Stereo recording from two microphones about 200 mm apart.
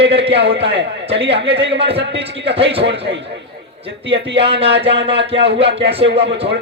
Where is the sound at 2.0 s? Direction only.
60° right (ahead or behind).